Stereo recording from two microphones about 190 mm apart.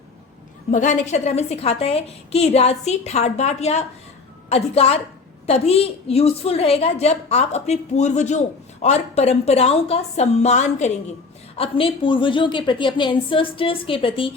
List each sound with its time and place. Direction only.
0.7 s a woman's voice: 40° left (ahead or behind)